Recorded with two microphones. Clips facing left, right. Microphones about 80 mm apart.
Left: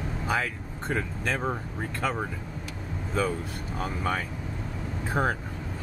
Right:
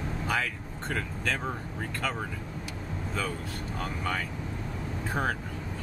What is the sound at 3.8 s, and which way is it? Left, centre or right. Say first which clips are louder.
Speech: left 4 dB; centre.